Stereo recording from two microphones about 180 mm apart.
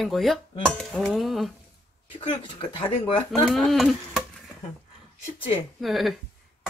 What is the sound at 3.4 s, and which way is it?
Dishes, centre (ahead or behind).